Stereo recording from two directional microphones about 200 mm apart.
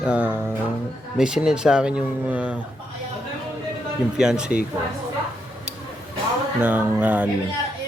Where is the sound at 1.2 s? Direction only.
5° right (ahead or behind).